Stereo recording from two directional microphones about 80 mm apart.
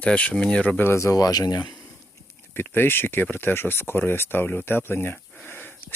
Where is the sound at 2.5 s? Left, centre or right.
Left.